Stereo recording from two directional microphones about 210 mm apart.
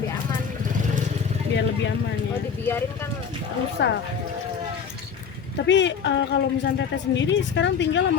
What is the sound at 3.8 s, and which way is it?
Speech, 55° left (ahead or behind).